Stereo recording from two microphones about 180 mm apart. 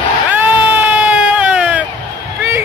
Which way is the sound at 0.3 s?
10° right (ahead or behind).